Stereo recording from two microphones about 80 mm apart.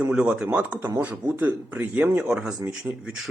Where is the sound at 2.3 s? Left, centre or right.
Centre.